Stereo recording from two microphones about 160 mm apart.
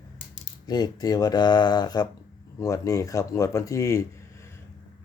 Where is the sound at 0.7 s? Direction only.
25° left (ahead or behind).